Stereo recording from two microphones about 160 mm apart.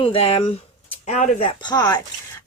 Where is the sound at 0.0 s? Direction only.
35° left (ahead or behind).